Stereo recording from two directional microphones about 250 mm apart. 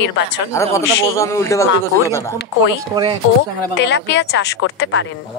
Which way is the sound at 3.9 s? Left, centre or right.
Left.